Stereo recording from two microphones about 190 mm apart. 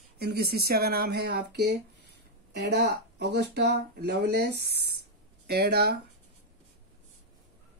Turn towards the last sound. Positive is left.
turn(degrees=-60)  # may be behind; listen again after turning